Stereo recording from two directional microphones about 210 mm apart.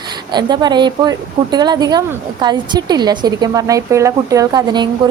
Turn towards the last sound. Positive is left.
turn(degrees=-20)  # may be behind; listen again after turning